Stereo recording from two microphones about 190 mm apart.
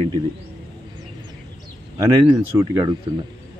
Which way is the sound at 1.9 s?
20° right (ahead or behind).